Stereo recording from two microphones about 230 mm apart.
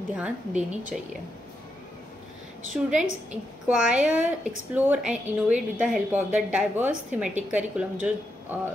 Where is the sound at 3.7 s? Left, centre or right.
Centre.